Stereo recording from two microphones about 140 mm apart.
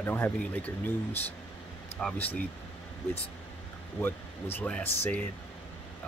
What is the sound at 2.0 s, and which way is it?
Speech, 5° left (ahead or behind).